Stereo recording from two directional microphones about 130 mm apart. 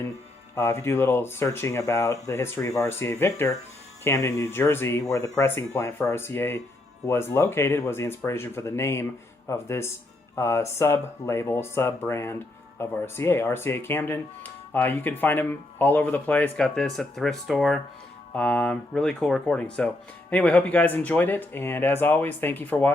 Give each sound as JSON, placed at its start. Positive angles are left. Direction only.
{"t": 0.5, "sound": "speech", "side_deg": 20}